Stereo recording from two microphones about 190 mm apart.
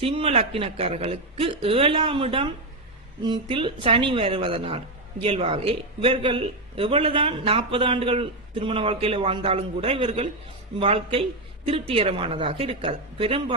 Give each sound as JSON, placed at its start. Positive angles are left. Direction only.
{"t": 0.0, "sound": "speech", "side_deg": -30}